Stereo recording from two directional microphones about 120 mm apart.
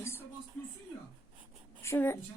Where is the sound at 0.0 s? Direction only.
20° left (ahead or behind).